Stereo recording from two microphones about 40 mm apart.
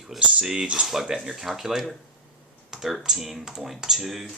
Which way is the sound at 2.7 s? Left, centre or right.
Centre.